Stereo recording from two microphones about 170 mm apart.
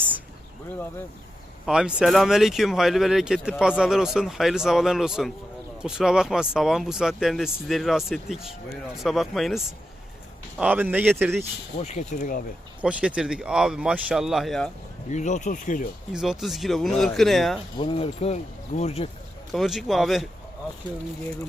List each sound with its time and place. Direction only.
1.6 s speech: 5° right (ahead or behind)
11.8 s speech: 45° left (ahead or behind)
12.8 s speech: 5° right (ahead or behind)
15.1 s speech: 45° left (ahead or behind)
16.1 s speech: centre (ahead or behind)
17.7 s speech: 35° left (ahead or behind)
19.5 s speech: centre (ahead or behind)